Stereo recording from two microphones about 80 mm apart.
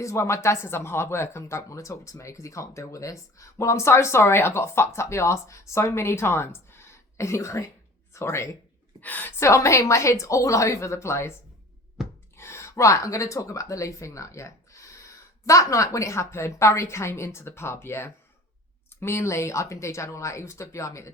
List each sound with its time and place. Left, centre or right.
0.0 s speech: left
9.0 s a woman's voice: left
9.4 s speech: left
12.0 s a sound: centre
12.4 s speech: left